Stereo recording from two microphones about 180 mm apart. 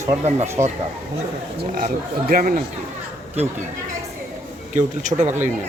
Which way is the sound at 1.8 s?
50° right (ahead or behind).